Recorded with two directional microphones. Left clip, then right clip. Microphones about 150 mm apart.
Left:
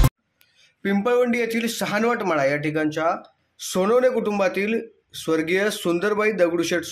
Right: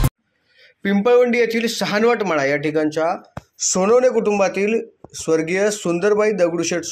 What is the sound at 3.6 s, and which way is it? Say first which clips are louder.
Speech: right 4 dB; 5° left (ahead or behind).